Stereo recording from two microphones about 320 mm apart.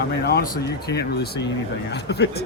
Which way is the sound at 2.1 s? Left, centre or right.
Left.